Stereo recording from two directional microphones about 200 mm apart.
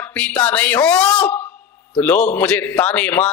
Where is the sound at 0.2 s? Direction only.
5° left (ahead or behind).